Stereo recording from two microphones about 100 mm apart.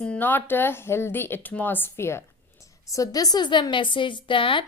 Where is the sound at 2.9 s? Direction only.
35° left (ahead or behind); by 4.6 s 60° left (ahead or behind).